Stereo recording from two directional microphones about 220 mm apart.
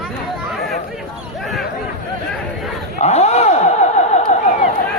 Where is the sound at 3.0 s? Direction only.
30° left (ahead or behind).